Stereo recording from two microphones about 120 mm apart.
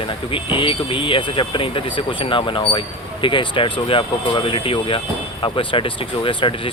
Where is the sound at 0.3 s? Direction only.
45° left (ahead or behind).